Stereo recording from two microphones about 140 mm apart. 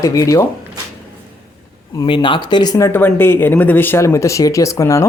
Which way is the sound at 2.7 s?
20° left (ahead or behind).